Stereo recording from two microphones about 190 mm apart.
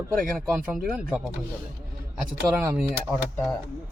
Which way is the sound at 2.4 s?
5° right (ahead or behind).